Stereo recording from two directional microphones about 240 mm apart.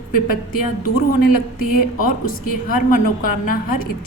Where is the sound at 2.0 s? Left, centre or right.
Left.